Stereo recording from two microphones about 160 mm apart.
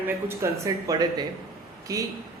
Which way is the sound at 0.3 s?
20° right (ahead or behind).